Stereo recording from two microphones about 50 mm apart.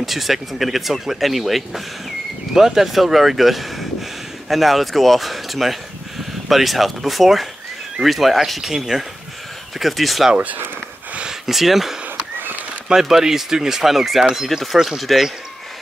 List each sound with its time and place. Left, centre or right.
0.0 s speech: centre
10.3 s speech: right
11.4 s speech: centre